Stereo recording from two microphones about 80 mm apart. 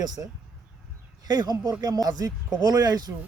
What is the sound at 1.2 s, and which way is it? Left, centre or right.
A man's voice, right.